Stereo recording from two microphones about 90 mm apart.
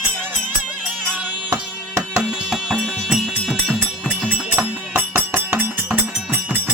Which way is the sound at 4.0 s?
15° right (ahead or behind).